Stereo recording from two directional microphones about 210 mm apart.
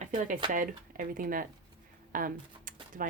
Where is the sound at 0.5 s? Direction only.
40° right (ahead or behind).